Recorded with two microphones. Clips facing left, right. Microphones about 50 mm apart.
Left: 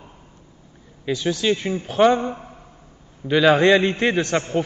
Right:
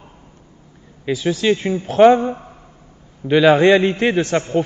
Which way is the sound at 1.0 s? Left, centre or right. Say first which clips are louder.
Right 3 dB; centre.